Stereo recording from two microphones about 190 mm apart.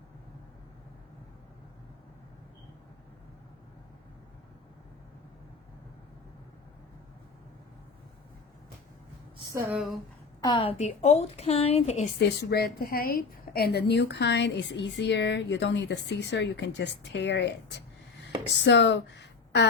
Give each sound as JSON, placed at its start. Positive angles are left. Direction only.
{"t": 9.5, "sound": "speech", "side_deg": -15}
{"t": 9.7, "sound": "speech", "side_deg": 0}
{"t": 10.4, "sound": "a woman's voice", "side_deg": 25}
{"t": 12.2, "sound": "a woman's voice", "side_deg": 60}